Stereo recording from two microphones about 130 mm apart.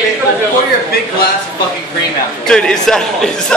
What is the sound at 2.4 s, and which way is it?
A man's voice, 5° left (ahead or behind).